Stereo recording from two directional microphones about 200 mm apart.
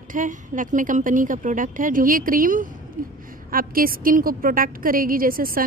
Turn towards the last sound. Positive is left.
turn(degrees=-45)  # may be behind; listen again after turning